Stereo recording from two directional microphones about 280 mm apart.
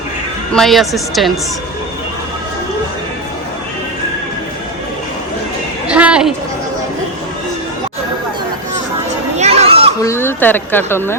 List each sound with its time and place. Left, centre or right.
0.5 s speech: centre
5.9 s a sound: centre
9.4 s children playing: right
10.0 s a woman's voice: centre